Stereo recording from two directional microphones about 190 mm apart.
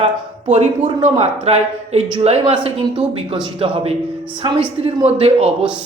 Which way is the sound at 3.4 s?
30° right (ahead or behind).